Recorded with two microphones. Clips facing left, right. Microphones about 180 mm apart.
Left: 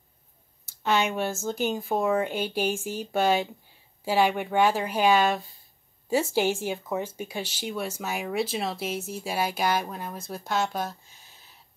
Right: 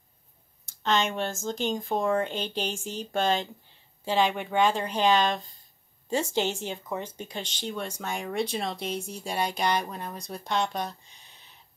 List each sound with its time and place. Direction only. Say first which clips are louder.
0.7 s speech: left 1 dB; 10° left (ahead or behind)